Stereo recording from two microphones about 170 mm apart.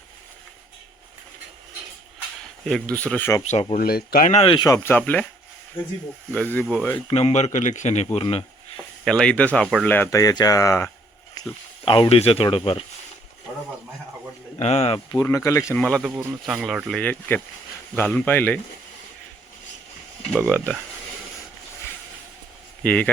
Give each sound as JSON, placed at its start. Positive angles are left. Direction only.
{"t": 2.6, "sound": "speech", "side_deg": 5}
{"t": 3.4, "sound": "speech", "side_deg": 40}
{"t": 3.8, "sound": "speech", "side_deg": 65}
{"t": 4.3, "sound": "speech", "side_deg": 35}
{"t": 6.3, "sound": "speech", "side_deg": 5}
{"t": 7.1, "sound": "speech", "side_deg": 40}
{"t": 9.0, "sound": "speech", "side_deg": 5}
{"t": 11.9, "sound": "speech", "side_deg": 30}
{"t": 14.6, "sound": "speech", "side_deg": 40}
{"t": 15.1, "sound": "speech", "side_deg": 20}
{"t": 16.0, "sound": "speech", "side_deg": -5}
{"t": 22.8, "sound": "speech", "side_deg": 5}